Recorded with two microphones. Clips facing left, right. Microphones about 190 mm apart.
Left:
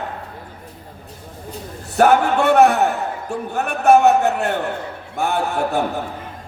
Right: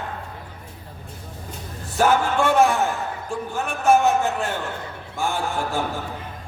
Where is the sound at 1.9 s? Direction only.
65° left (ahead or behind).